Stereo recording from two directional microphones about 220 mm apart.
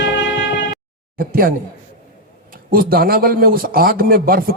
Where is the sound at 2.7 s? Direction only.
40° right (ahead or behind).